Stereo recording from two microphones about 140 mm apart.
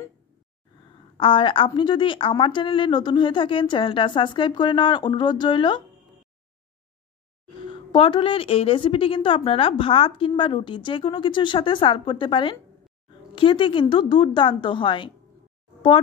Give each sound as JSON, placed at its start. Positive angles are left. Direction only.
{"t": 1.1, "sound": "a woman's voice", "side_deg": 40}
{"t": 7.6, "sound": "a woman's voice", "side_deg": 40}